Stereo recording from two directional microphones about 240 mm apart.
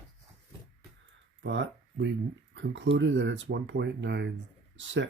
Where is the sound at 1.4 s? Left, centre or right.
Right.